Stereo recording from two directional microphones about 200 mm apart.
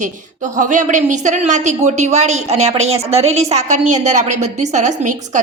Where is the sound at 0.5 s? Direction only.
40° right (ahead or behind).